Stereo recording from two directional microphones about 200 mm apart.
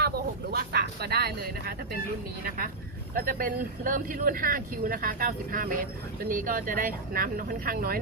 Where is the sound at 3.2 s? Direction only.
45° right (ahead or behind).